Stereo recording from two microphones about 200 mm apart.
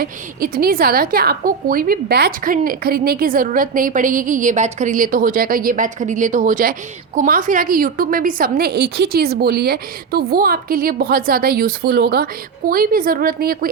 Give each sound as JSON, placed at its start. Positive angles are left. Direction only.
{"t": 0.0, "sound": "a woman's voice", "side_deg": -45}